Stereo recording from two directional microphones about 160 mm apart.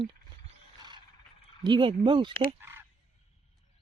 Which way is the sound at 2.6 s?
15° right (ahead or behind).